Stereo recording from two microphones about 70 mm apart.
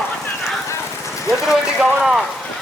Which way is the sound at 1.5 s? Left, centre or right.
Centre.